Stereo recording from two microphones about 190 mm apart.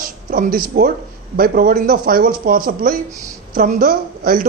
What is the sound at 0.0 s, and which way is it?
A man's voice, 50° right (ahead or behind).